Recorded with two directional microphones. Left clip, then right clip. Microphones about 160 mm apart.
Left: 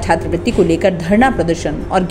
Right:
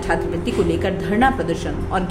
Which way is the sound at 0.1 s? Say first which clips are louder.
Left 6 dB; 40° left (ahead or behind).